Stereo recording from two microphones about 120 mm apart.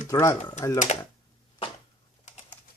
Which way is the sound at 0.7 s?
90° left.